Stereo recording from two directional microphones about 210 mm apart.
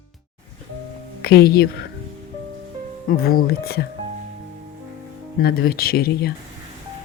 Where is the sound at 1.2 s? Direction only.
50° left (ahead or behind).